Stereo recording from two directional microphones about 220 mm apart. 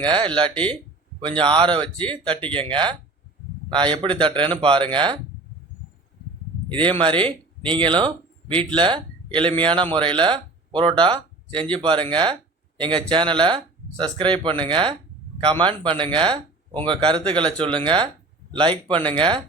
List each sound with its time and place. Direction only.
0.3 s speech: 20° right (ahead or behind)
6.7 s speech: 25° right (ahead or behind)